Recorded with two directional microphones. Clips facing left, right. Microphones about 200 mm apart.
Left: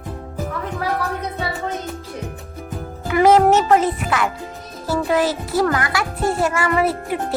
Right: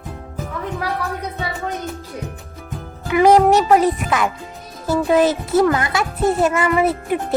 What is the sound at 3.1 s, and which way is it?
Speech, 15° right (ahead or behind).